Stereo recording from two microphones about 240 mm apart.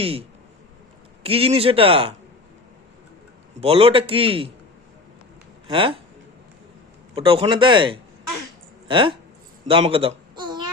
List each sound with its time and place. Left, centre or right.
0.0 s speech: right
3.6 s speech: right
5.6 s speech: right
7.2 s speech: right
9.6 s baby cry: right